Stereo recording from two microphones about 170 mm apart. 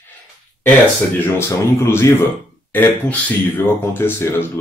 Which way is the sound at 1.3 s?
15° left (ahead or behind).